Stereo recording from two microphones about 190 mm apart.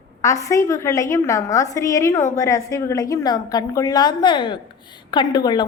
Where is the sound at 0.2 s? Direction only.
15° left (ahead or behind).